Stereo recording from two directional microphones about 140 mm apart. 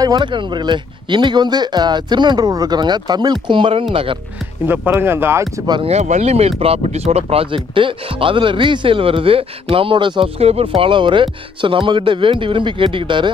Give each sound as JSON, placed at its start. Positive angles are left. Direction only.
{"t": 0.0, "sound": "speech", "side_deg": -30}
{"t": 4.6, "sound": "speech", "side_deg": -15}
{"t": 5.9, "sound": "speech", "side_deg": -55}